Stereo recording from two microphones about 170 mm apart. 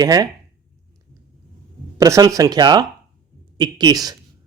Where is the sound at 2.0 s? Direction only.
20° right (ahead or behind).